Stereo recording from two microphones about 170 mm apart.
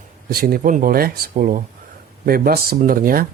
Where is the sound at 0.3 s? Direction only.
60° right (ahead or behind).